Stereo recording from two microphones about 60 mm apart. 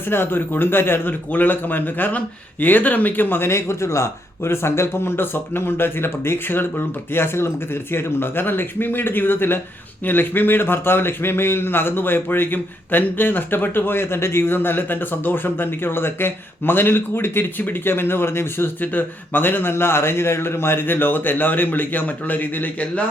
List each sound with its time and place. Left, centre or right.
0.1 s a man's voice: left